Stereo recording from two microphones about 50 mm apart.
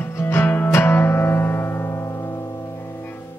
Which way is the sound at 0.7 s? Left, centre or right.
Left.